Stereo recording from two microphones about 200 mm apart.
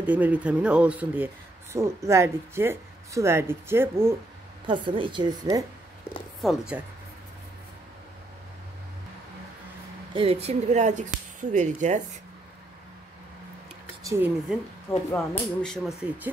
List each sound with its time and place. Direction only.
0.0 s speech: 5° right (ahead or behind)
4.6 s a woman's voice: 25° right (ahead or behind)
6.4 s speech: 5° right (ahead or behind)
10.1 s speech: 30° right (ahead or behind)
14.0 s speech: 15° right (ahead or behind)
14.9 s speech: 5° left (ahead or behind)